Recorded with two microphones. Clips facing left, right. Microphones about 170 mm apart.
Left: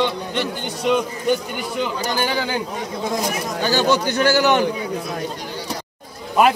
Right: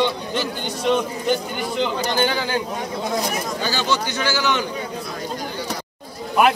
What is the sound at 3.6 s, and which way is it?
A man's voice, 50° left (ahead or behind).